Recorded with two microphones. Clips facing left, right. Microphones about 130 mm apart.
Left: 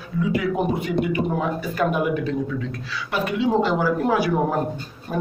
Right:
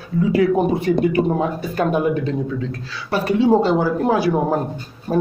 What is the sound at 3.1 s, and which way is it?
A man's voice, 35° right (ahead or behind).